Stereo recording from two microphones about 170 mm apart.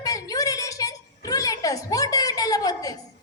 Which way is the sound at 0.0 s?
20° left (ahead or behind).